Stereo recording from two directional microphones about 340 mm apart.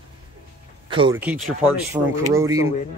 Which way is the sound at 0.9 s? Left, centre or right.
Centre.